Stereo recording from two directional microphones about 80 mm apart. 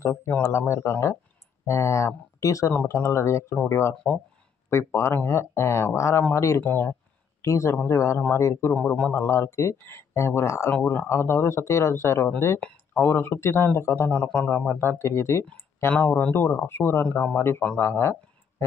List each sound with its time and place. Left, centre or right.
0.0 s speech: left
2.9 s speech: left
6.6 s speech: left
7.4 s speech: left
8.7 s a man's voice: centre
9.1 s speech: left
12.5 s a sound: centre
13.0 s speech: left
14.3 s speech: centre; by 15.4 s left
16.1 s speech: left
16.4 s speech: left